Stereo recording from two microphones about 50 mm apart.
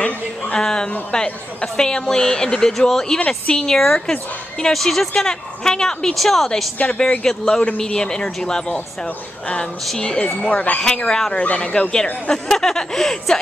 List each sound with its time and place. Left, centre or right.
0.6 s a woman's voice: centre
6.8 s speech: left
7.2 s speech: centre
9.9 s speech: centre
10.5 s speech: left
10.8 s speech: centre
11.3 s speech: left
12.3 s speech: centre